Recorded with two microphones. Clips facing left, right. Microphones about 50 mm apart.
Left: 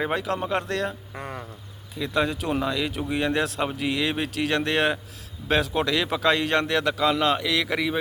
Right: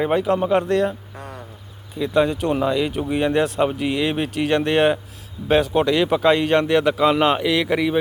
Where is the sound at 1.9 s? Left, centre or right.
Centre; by 7.5 s right.